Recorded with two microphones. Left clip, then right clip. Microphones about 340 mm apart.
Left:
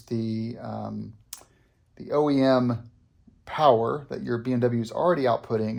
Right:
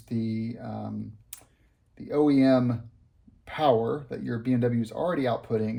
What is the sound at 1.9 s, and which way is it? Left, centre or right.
Speech, centre.